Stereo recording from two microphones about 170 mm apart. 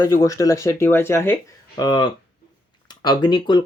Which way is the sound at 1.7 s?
25° left (ahead or behind).